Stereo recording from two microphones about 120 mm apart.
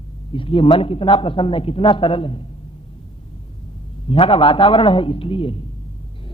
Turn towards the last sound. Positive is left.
turn(degrees=50)  # may be behind; listen again after turning